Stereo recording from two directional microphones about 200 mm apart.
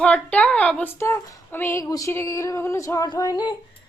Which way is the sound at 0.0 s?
5° left (ahead or behind).